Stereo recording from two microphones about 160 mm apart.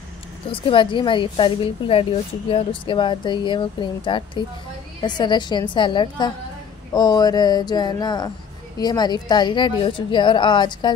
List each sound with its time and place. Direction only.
0.5 s a woman's voice: 30° left (ahead or behind)